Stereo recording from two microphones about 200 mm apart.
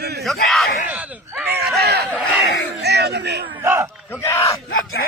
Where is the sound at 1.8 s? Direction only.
55° right (ahead or behind).